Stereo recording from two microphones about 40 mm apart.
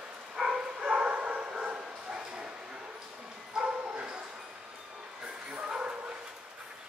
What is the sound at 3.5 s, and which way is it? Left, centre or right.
Bow-wow, right.